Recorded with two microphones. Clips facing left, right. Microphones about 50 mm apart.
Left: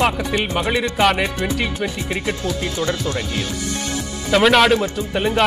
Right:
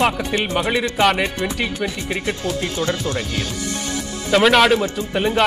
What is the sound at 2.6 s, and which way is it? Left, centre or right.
Speech, left.